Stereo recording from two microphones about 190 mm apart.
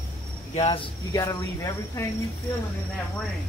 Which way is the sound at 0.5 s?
30° left (ahead or behind).